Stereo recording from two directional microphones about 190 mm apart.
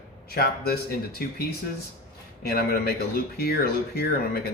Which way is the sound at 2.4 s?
55° left (ahead or behind).